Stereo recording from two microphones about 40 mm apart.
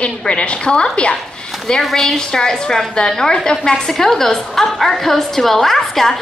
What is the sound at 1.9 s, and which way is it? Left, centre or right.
A woman's voice, centre.